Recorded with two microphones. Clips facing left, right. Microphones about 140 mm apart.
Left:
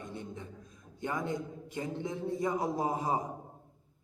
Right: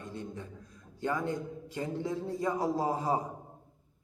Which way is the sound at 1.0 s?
20° left (ahead or behind).